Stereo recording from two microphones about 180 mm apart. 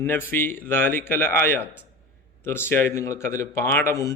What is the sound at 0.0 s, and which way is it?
A man's voice, 10° left (ahead or behind).